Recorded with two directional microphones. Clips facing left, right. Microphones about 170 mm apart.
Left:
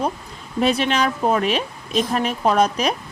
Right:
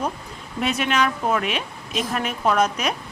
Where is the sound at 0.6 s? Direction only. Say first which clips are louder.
Left 3 dB; 35° left (ahead or behind).